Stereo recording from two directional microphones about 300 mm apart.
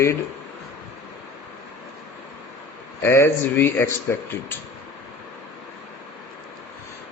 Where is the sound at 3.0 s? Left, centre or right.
Centre.